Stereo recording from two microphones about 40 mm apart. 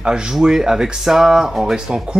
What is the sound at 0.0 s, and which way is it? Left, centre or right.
Speech, right.